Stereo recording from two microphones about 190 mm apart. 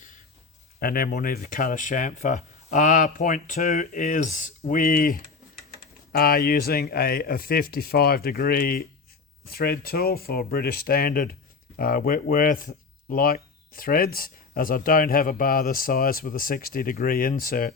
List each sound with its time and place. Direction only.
0.8 s speech: 50° left (ahead or behind)